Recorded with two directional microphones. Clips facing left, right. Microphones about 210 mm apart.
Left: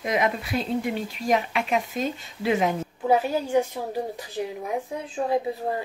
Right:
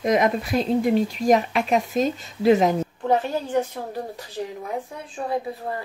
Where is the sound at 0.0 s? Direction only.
40° right (ahead or behind).